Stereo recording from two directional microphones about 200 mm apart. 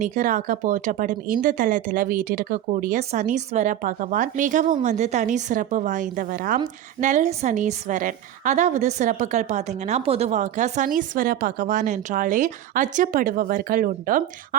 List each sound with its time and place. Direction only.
0.0 s a woman's voice: 40° right (ahead or behind)